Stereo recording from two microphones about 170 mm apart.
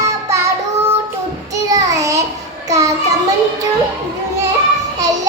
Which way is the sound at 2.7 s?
20° right (ahead or behind).